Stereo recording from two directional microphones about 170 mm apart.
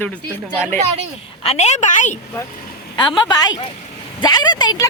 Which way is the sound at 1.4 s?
40° left (ahead or behind).